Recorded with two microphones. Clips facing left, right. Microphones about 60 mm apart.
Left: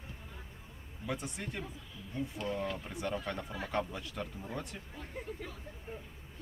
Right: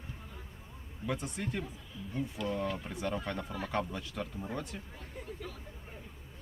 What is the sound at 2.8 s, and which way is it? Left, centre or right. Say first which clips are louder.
Speech: right 1 dB; centre.